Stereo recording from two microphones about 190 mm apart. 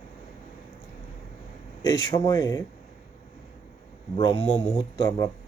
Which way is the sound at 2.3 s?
15° left (ahead or behind).